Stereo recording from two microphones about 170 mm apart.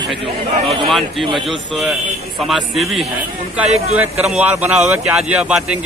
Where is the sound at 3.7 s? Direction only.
40° right (ahead or behind).